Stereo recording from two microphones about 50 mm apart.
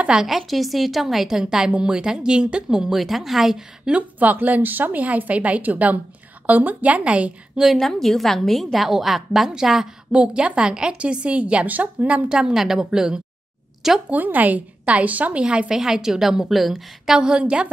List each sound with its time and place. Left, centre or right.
0.4 s a woman's voice: centre
3.0 s a woman's voice: centre
3.9 s a woman's voice: centre
4.2 s a woman's voice: right
7.5 s a woman's voice: centre
7.8 s a woman's voice: centre
10.1 s a woman's voice: right
12.3 s a woman's voice: centre
14.0 s a woman's voice: right
15.4 s a woman's voice: centre
15.8 s a woman's voice: centre
17.2 s a woman's voice: centre